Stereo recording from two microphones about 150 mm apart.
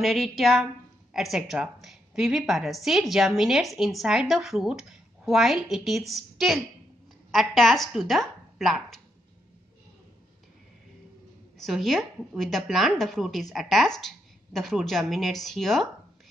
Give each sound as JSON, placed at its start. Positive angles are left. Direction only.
{"t": 0.0, "sound": "a woman's voice", "side_deg": 0}
{"t": 11.5, "sound": "a woman's voice", "side_deg": 0}